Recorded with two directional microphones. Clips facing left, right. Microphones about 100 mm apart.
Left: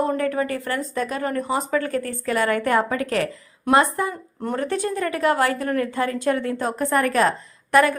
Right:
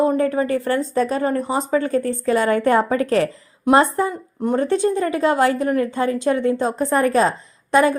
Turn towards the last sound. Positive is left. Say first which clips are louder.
# right 2 dB
turn(degrees=-20)  # may be behind; listen again after turning